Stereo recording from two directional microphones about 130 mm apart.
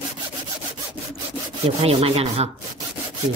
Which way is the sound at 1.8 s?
50° right (ahead or behind).